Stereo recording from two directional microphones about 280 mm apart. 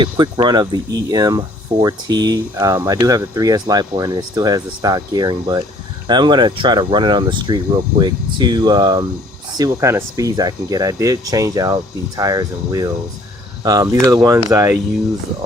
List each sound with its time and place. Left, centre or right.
0.0 s speech: centre